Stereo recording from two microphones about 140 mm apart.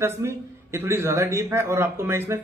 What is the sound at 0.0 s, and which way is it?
A man's voice, 20° right (ahead or behind).